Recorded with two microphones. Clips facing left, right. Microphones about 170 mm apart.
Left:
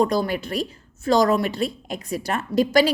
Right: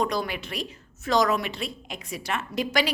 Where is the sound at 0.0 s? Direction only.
35° left (ahead or behind).